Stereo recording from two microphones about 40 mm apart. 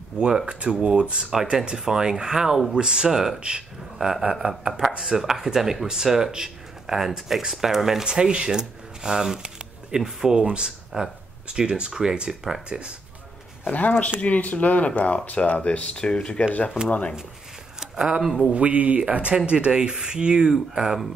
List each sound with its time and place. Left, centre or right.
0.2 s speech: right; by 3.3 s centre
3.3 s speech: right
4.0 s speech: centre
12.6 s speech: right
13.7 s speech: left
16.4 s speech: left
18.2 s speech: centre
18.5 s speech: right; by 21.0 s centre